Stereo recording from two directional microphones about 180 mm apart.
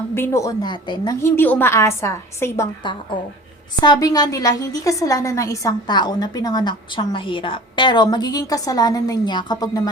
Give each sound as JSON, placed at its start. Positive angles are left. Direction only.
{"t": 0.1, "sound": "a woman's voice", "side_deg": 15}
{"t": 1.2, "sound": "a woman's voice", "side_deg": 10}